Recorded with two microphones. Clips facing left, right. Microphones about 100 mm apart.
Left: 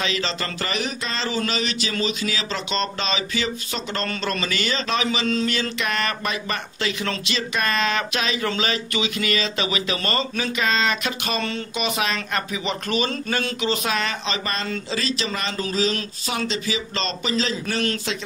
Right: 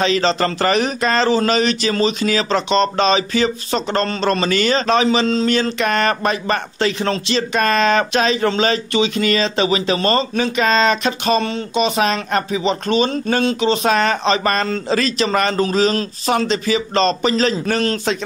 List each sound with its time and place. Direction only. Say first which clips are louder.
0.0 s speech: right 10 dB; 35° right (ahead or behind)